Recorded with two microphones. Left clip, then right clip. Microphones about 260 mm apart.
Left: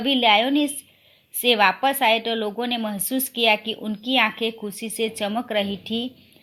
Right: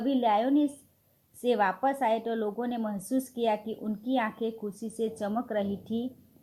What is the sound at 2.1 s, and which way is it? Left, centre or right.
A woman's voice, left.